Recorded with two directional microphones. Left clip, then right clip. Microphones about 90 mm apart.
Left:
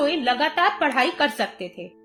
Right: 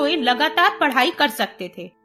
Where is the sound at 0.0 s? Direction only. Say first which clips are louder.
Right 2 dB; 40° right (ahead or behind).